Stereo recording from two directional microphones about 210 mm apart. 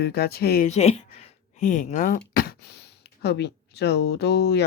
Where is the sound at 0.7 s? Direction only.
30° left (ahead or behind).